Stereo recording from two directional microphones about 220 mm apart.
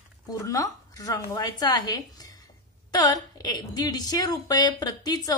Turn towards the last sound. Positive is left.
turn(degrees=15)  # may be behind; listen again after turning